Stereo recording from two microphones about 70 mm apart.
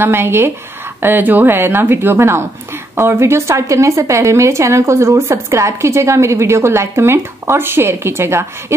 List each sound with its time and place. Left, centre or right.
0.0 s speech: right